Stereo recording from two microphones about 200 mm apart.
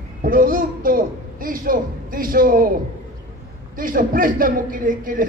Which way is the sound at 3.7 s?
45° right (ahead or behind).